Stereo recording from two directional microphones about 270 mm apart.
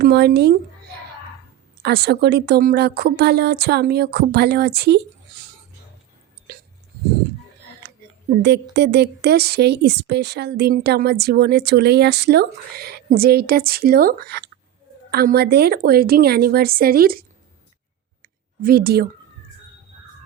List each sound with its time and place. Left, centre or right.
0.0 s speech: right
1.8 s speech: right
8.4 s speech: right
18.6 s speech: right